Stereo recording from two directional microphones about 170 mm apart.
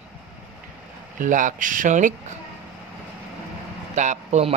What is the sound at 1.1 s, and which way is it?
Speech, 50° right (ahead or behind).